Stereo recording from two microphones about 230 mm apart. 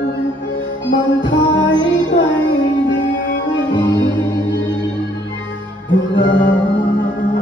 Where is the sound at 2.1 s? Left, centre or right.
Left.